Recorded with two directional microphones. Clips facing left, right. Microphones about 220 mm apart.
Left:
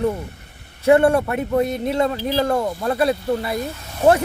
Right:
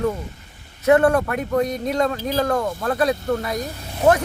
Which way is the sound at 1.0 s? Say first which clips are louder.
Left 1 dB; 10° left (ahead or behind).